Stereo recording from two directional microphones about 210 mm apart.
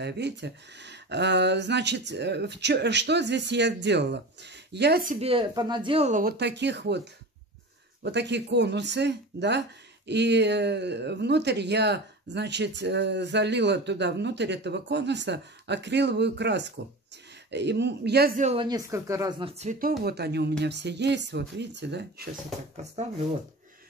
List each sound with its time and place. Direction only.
0.0 s speech: 55° right (ahead or behind)
5.2 s speech: 25° right (ahead or behind)
6.3 s speech: 55° right (ahead or behind)
8.0 s speech: 55° right (ahead or behind)
18.4 s speech: 25° right (ahead or behind)
19.6 s speech: 35° right (ahead or behind)
20.0 s speech: 50° right (ahead or behind)